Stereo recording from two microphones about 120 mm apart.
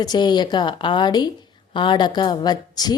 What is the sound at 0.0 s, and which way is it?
Speech, 35° left (ahead or behind).